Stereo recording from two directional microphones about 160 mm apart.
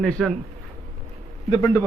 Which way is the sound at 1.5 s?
20° left (ahead or behind).